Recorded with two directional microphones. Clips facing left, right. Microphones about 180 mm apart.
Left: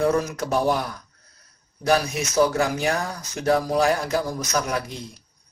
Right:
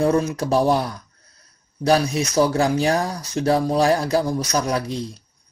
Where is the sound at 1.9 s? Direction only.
30° right (ahead or behind).